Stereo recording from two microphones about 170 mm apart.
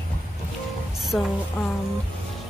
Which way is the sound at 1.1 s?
Centre (ahead or behind).